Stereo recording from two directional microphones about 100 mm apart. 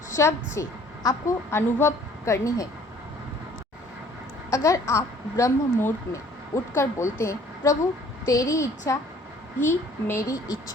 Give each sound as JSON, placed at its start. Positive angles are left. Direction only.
{"t": 0.1, "sound": "a woman's voice", "side_deg": 30}
{"t": 4.5, "sound": "a woman's voice", "side_deg": 35}